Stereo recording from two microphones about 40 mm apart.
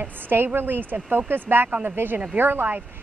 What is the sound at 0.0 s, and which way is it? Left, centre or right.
Speech, right.